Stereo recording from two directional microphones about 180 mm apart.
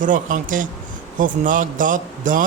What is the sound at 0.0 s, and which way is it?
A man's voice, 45° right (ahead or behind).